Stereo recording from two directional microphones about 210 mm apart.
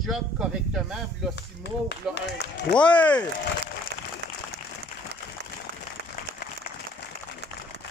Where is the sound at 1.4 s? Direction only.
55° left (ahead or behind).